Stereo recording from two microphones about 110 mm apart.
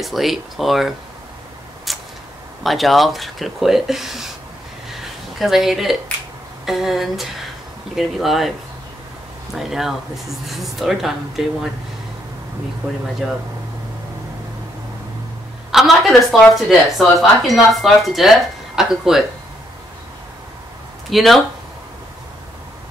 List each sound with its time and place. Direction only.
0.0 s speech: centre (ahead or behind)
1.9 s tick-tock: centre (ahead or behind)
2.6 s speech: centre (ahead or behind)
4.9 s a sound: centre (ahead or behind)
6.6 s speech: 5° right (ahead or behind)
9.6 s speech: 5° right (ahead or behind)
13.2 s speech: centre (ahead or behind)
15.7 s speech: centre (ahead or behind)
21.1 s speech: centre (ahead or behind)